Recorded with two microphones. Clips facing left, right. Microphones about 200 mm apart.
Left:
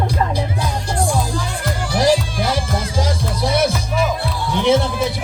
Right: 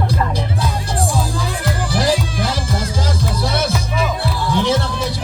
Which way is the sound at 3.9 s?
Centre (ahead or behind).